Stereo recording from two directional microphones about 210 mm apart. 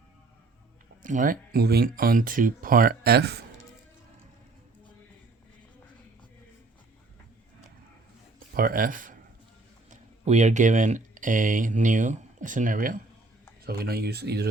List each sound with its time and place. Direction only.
1.0 s speech: 40° right (ahead or behind)
8.5 s speech: 45° right (ahead or behind)